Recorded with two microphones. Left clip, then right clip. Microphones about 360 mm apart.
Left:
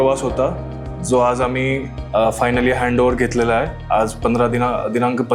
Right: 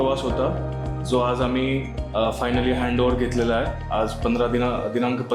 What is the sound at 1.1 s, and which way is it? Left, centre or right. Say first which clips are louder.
Speech: left 6 dB; left.